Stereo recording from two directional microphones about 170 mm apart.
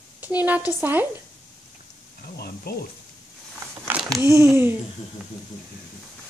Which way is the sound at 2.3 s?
70° left (ahead or behind).